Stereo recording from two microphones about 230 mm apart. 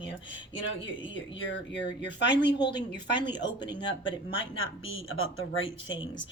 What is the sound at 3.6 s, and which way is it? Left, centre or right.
Speech, left.